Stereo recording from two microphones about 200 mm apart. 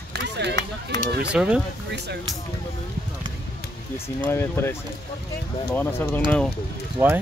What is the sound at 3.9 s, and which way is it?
Speech, 10° left (ahead or behind).